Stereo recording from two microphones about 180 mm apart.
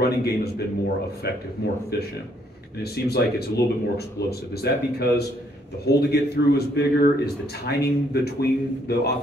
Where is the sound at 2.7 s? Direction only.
60° left (ahead or behind).